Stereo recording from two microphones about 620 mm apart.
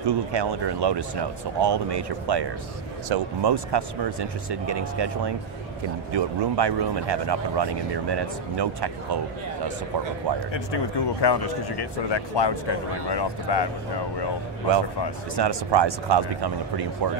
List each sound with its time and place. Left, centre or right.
0.0 s speech: right
10.5 s speech: left
15.3 s speech: right